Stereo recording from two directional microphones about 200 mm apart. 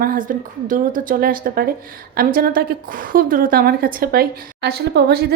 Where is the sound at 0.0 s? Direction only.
45° right (ahead or behind).